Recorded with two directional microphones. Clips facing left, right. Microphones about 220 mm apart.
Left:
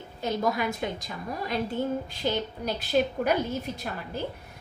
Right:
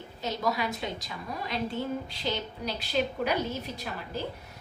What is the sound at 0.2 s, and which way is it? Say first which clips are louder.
A woman's voice: left 3 dB; 50° left (ahead or behind).